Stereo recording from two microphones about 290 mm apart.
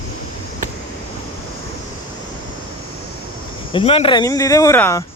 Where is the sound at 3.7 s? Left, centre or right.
Centre.